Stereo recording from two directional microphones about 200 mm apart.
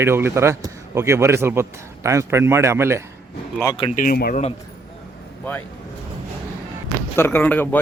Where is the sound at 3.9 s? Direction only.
40° left (ahead or behind).